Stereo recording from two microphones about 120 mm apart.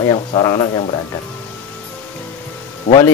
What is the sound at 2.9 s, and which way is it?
Speech, 90° left.